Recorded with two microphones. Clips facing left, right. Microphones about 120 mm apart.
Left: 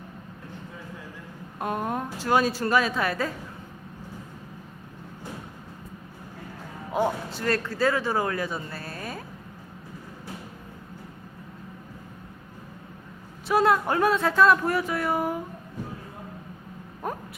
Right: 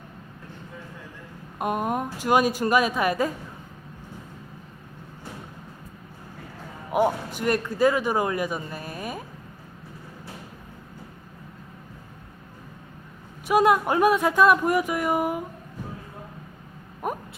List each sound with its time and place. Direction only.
1.5 s speech: 15° right (ahead or behind)
6.9 s speech: 15° right (ahead or behind)
13.5 s speech: 15° right (ahead or behind)
17.0 s a sound: 15° right (ahead or behind)